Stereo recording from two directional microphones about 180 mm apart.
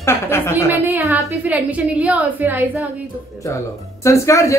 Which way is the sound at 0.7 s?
15° right (ahead or behind).